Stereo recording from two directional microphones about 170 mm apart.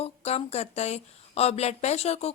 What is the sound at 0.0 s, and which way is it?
A woman's voice, 40° left (ahead or behind).